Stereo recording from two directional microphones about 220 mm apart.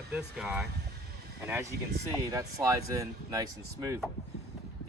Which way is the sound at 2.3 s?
15° right (ahead or behind).